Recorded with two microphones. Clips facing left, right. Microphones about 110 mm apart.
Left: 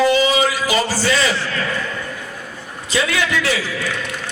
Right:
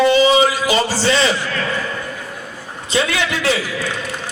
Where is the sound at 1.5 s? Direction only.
40° right (ahead or behind).